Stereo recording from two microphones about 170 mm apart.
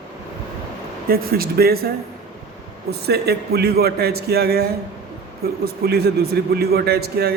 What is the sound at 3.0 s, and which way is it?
A man's voice, 70° right (ahead or behind).